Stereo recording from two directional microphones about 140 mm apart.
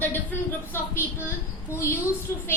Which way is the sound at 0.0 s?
15° left (ahead or behind).